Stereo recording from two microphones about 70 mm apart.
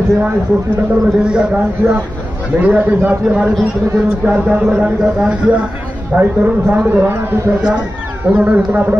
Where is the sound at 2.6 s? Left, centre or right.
Right.